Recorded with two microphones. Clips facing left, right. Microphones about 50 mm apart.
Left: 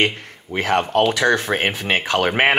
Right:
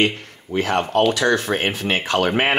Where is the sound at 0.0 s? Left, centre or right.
Left.